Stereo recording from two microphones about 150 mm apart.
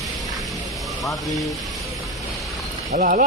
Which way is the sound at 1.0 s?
Centre (ahead or behind).